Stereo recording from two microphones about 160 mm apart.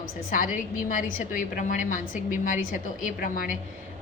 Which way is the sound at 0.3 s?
55° left (ahead or behind).